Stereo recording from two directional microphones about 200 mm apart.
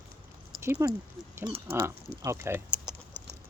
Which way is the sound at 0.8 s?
15° right (ahead or behind).